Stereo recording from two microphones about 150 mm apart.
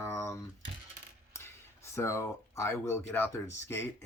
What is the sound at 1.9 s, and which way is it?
Speech, 20° left (ahead or behind).